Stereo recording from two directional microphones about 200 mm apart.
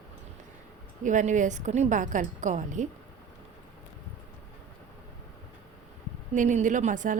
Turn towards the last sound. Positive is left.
turn(degrees=-40)  # may be behind; listen again after turning